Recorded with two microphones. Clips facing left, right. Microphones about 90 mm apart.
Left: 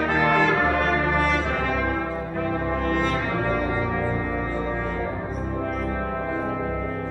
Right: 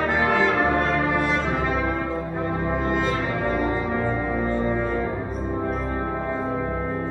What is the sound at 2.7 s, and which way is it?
Brass instrument, 30° right (ahead or behind).